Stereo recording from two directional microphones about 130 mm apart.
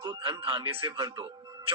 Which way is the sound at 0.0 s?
40° right (ahead or behind).